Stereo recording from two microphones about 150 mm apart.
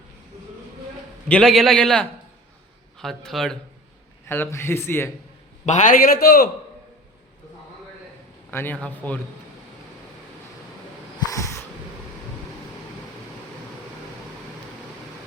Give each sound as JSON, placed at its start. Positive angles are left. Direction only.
{"t": 1.3, "sound": "a man's voice", "side_deg": 5}
{"t": 4.3, "sound": "a man's voice", "side_deg": 15}
{"t": 5.6, "sound": "a man's voice", "side_deg": 55}
{"t": 8.4, "sound": "a man's voice", "side_deg": 15}
{"t": 11.3, "sound": "a sound", "side_deg": 20}